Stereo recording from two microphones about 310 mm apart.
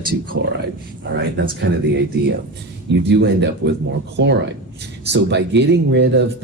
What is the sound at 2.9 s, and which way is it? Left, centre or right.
A man's voice, right.